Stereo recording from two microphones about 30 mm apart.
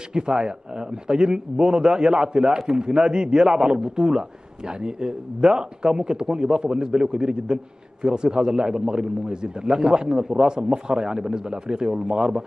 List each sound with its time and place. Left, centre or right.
0.1 s a man's voice: right